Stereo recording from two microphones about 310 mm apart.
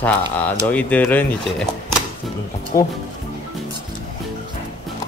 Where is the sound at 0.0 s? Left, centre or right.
Centre.